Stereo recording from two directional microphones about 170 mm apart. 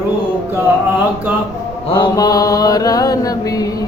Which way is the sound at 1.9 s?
25° left (ahead or behind).